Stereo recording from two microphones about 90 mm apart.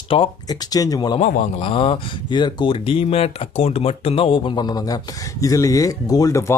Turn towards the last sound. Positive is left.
turn(degrees=35)  # may be behind; listen again after turning